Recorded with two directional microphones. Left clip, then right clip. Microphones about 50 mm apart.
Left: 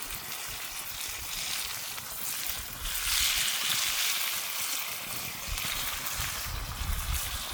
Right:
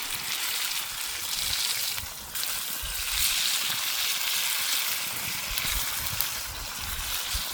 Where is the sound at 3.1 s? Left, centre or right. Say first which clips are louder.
Right 2 dB; right.